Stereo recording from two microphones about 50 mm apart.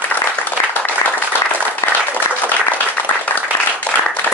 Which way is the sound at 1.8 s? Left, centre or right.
Left.